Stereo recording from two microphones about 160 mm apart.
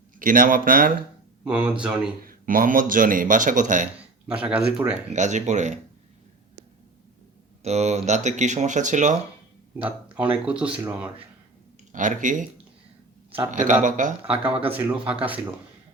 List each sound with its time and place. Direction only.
0.2 s speech: 60° right (ahead or behind)
1.5 s speech: 5° right (ahead or behind)
2.2 s speech: 60° right (ahead or behind)
3.9 s a sound: 10° right (ahead or behind)
4.5 s speech: 5° right (ahead or behind)
5.1 s speech: 50° right (ahead or behind)
7.6 s speech: 45° right (ahead or behind)
9.8 s speech: 10° right (ahead or behind)
11.9 s speech: 55° right (ahead or behind)
13.5 s speech: 55° right (ahead or behind)
14.3 s speech: 10° right (ahead or behind)